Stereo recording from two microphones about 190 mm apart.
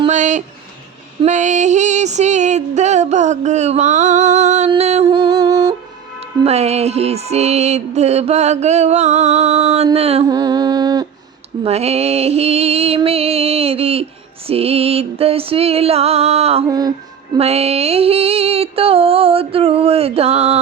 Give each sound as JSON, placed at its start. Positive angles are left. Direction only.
{"t": 0.1, "sound": "music", "side_deg": -40}
{"t": 5.0, "sound": "a sound", "side_deg": -20}
{"t": 6.4, "sound": "music", "side_deg": -35}
{"t": 10.2, "sound": "a sound", "side_deg": -20}
{"t": 11.6, "sound": "music", "side_deg": -35}
{"t": 16.6, "sound": "music", "side_deg": -20}
{"t": 17.3, "sound": "female singing", "side_deg": -35}